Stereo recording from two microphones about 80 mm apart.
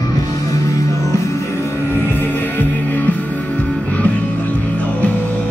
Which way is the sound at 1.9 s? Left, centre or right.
Left.